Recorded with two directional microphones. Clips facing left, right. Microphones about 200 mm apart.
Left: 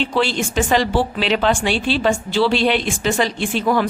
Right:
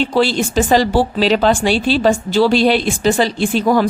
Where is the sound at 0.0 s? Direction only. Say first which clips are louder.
Right 4 dB; 35° right (ahead or behind).